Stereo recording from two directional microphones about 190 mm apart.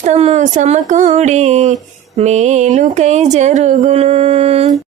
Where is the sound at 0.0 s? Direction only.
35° right (ahead or behind).